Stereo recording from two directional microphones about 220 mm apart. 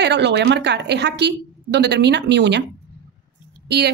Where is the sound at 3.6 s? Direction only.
50° right (ahead or behind).